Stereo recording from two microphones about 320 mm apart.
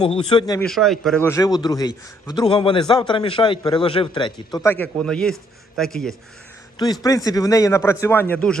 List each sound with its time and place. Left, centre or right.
0.0 s a man's voice: centre
0.7 s a man's voice: centre